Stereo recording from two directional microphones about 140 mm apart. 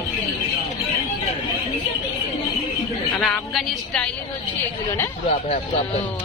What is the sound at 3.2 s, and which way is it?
Speech, centre (ahead or behind).